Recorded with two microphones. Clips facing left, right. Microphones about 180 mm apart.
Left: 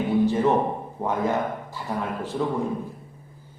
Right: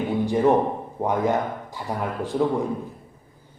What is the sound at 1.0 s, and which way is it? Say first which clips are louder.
Speech: right 2 dB; 15° right (ahead or behind).